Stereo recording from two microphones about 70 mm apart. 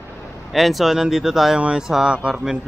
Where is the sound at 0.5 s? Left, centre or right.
Centre.